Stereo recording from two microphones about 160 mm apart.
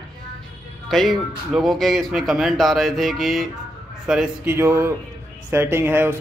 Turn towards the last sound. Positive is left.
turn(degrees=-15)  # may be behind; listen again after turning